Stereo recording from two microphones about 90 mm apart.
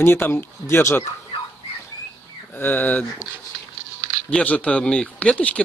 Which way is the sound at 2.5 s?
20° left (ahead or behind).